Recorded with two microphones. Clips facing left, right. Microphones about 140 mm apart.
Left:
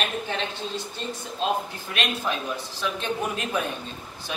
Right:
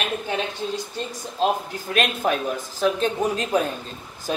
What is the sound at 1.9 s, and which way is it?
A woman's voice, 50° right (ahead or behind).